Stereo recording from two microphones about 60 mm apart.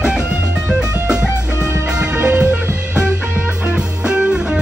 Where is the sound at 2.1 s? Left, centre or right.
Right.